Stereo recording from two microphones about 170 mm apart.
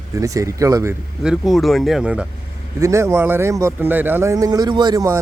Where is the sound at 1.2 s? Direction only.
Centre (ahead or behind).